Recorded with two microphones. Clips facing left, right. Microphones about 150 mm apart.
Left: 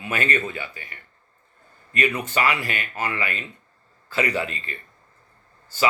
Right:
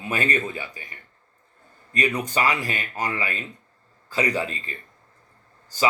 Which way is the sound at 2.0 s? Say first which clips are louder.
Even; 15° right (ahead or behind).